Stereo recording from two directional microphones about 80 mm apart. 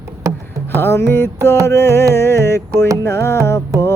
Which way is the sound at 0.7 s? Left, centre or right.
Left.